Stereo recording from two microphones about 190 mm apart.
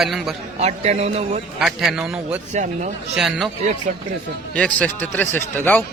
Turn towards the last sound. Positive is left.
turn(degrees=10)  # may be behind; listen again after turning